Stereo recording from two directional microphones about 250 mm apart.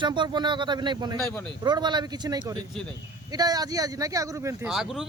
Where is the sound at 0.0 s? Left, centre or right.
Centre.